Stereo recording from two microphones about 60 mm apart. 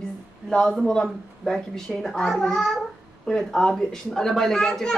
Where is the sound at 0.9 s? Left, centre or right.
Centre.